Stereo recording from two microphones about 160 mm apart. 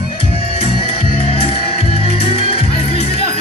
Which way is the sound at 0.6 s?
40° left (ahead or behind).